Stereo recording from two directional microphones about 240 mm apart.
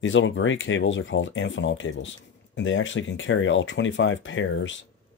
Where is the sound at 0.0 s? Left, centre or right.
Left.